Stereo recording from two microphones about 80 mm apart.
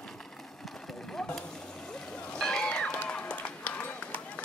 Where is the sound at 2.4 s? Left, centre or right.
Centre.